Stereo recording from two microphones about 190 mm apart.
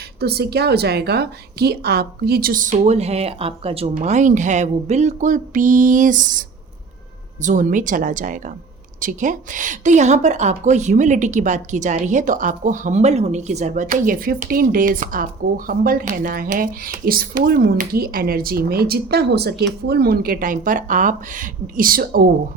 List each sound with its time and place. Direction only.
0.2 s a woman's voice: 55° right (ahead or behind)
7.4 s a woman's voice: 40° right (ahead or behind)